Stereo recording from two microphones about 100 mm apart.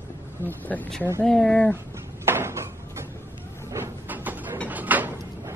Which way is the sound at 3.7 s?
20° right (ahead or behind).